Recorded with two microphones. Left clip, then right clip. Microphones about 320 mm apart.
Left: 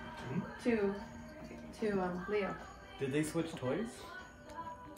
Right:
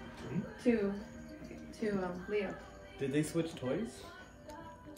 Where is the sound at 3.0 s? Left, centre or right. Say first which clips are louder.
Right 1 dB; centre.